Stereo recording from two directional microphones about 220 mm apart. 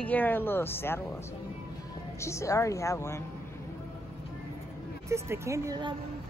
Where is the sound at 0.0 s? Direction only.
10° left (ahead or behind).